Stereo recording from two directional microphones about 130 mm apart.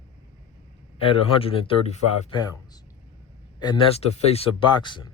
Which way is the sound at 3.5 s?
35° left (ahead or behind).